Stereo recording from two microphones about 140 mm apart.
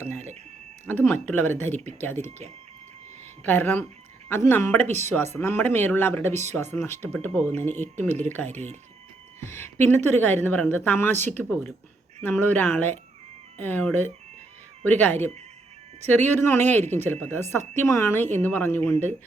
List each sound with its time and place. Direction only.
0.0 s a sound: 15° left (ahead or behind)
1.0 s speech: 10° left (ahead or behind)
3.4 s speech: 15° left (ahead or behind)
4.9 s speech: 55° right (ahead or behind)
5.4 s speech: 15° left (ahead or behind)
8.4 s speech: 55° right (ahead or behind)
9.4 s speech: 15° left (ahead or behind)
12.2 s speech: 15° left (ahead or behind)